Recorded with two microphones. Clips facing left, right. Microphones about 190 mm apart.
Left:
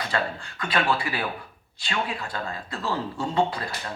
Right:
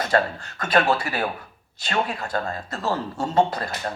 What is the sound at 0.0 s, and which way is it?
Speech, 45° right (ahead or behind).